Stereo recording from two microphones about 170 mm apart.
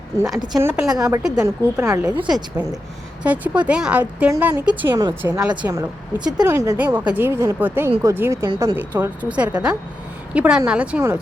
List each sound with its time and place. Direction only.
0.4 s a woman's voice: 25° right (ahead or behind)
0.7 s a woman's voice: 5° right (ahead or behind)
1.4 s a woman's voice: 15° right (ahead or behind)
2.2 s a woman's voice: 5° right (ahead or behind)